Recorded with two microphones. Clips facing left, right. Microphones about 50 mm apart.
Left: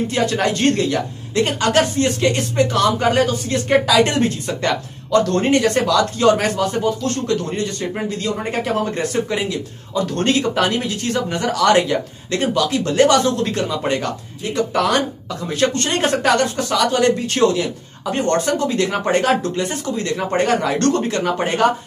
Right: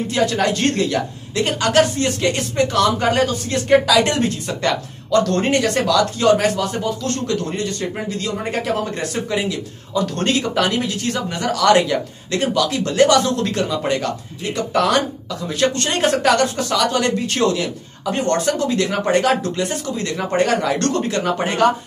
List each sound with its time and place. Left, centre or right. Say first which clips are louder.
0.1 s a woman's voice: right 4 dB; centre
8.2 s a woman's voice: even; centre
16.0 s a woman's voice: right 1 dB; centre